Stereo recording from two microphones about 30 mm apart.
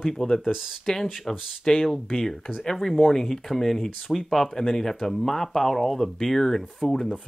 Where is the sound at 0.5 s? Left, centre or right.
Centre.